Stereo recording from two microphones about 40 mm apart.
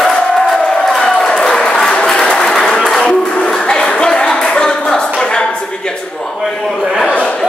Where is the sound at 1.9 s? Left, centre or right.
Centre.